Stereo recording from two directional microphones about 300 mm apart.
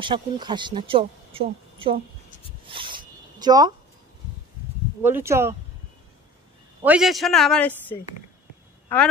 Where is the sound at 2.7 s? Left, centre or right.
Centre.